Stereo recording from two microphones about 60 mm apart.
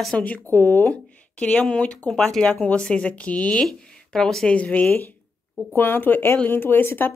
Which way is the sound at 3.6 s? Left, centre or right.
Centre.